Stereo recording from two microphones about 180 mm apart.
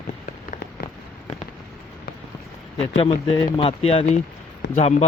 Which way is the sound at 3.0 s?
30° left (ahead or behind).